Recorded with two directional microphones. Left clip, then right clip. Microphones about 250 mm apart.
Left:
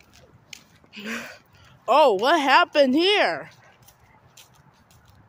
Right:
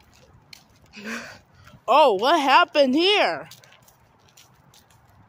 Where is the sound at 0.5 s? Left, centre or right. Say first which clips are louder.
Left 3 dB; centre.